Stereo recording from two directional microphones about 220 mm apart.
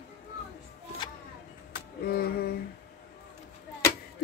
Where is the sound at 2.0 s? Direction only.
45° left (ahead or behind).